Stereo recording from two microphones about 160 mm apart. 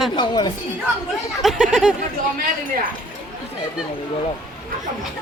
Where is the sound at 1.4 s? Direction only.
5° right (ahead or behind).